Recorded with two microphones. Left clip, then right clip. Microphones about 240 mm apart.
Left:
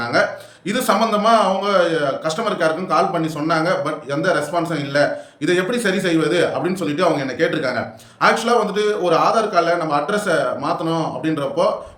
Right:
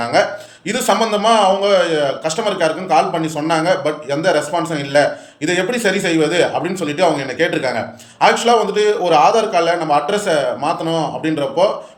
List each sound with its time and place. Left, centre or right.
0.0 s a man's voice: centre